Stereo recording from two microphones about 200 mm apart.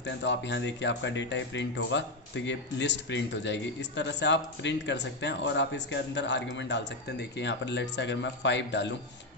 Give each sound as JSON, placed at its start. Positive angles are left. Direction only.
{"t": 0.0, "sound": "speech", "side_deg": 60}